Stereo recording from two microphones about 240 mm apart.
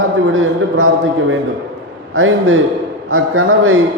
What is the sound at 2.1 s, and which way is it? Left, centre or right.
A man's voice, right.